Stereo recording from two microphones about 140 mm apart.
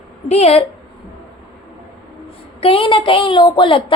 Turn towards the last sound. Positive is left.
turn(degrees=35)  # may be behind; listen again after turning